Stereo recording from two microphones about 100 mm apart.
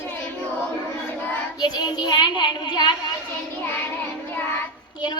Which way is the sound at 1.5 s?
40° left (ahead or behind).